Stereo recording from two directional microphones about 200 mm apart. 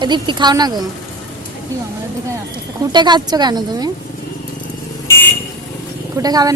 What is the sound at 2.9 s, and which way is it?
A woman's voice, 20° right (ahead or behind).